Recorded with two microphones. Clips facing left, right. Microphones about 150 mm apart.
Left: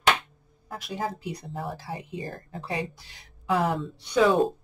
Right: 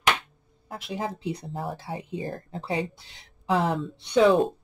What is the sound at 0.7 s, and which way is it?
Speech, 25° right (ahead or behind).